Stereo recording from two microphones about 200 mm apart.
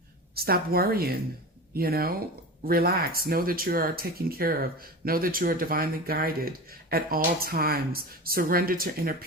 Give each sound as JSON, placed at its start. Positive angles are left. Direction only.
{"t": 0.3, "sound": "speech", "side_deg": -50}